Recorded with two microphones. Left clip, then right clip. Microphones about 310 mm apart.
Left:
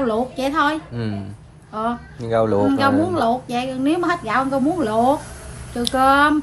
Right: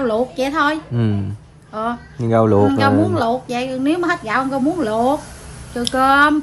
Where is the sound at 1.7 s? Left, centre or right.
Centre.